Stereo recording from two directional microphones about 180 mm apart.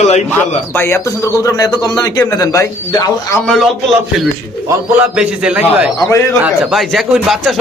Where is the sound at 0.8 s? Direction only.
15° left (ahead or behind).